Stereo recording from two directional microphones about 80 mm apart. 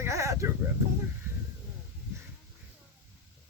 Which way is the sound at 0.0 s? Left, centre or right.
Right.